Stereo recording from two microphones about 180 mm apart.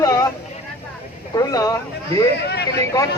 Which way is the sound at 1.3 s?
20° left (ahead or behind).